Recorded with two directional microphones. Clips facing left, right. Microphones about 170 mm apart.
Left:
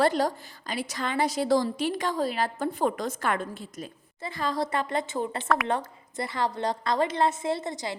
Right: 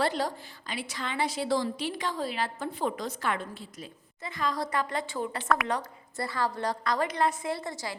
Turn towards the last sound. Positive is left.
turn(degrees=20)  # may be behind; listen again after turning